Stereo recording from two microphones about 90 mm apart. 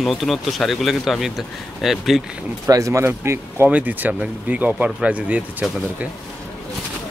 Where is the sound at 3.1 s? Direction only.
25° right (ahead or behind).